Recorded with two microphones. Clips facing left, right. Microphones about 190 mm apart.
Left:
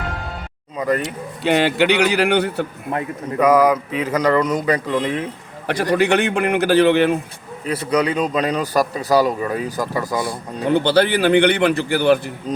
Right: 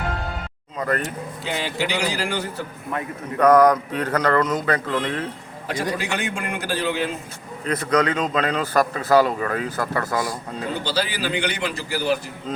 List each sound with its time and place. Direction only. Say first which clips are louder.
0.8 s speech: left 4 dB; 15° left (ahead or behind)
1.5 s a man's voice: left 10 dB; 65° left (ahead or behind)
3.3 s speech: even; 10° left (ahead or behind)
5.6 s a man's voice: left 9 dB; 70° left (ahead or behind)
7.7 s speech: left 2 dB; 10° left (ahead or behind)
10.7 s a man's voice: left 11 dB; 65° left (ahead or behind)
12.5 s a man's voice: left 3 dB; 15° left (ahead or behind)